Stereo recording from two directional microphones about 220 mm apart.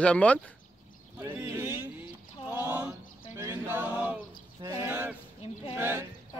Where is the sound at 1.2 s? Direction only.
10° right (ahead or behind).